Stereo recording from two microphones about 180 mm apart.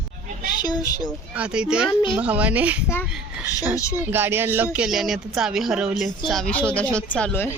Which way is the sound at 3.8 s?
15° left (ahead or behind).